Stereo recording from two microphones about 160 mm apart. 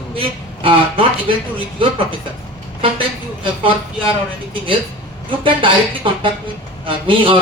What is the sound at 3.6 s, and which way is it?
Speech, 35° right (ahead or behind).